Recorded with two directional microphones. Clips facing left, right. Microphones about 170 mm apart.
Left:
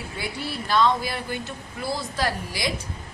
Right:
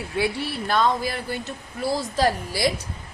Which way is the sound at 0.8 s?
45° right (ahead or behind).